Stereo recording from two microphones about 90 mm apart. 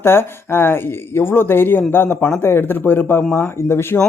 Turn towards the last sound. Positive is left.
turn(degrees=25)  # may be behind; listen again after turning